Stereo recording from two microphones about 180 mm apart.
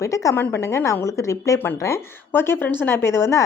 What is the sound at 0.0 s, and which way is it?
A woman's voice, 15° left (ahead or behind).